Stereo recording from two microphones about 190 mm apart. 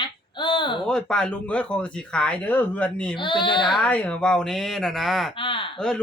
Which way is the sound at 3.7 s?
5° left (ahead or behind).